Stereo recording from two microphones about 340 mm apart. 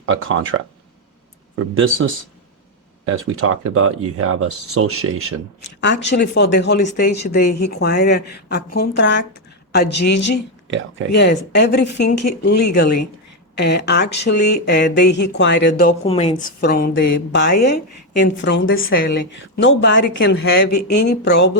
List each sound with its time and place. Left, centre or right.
0.0 s speech: right
1.5 s speech: right
3.1 s speech: right
5.8 s speech: left
10.7 s speech: right
11.1 s a woman's voice: left
20.7 s speech: left
21.1 s speech: left